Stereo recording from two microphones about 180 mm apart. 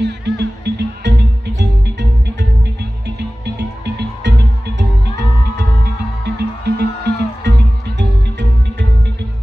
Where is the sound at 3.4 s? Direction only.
70° right (ahead or behind); by 4.8 s 90° right.